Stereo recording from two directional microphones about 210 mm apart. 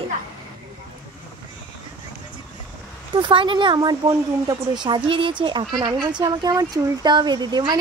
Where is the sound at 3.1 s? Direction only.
25° right (ahead or behind).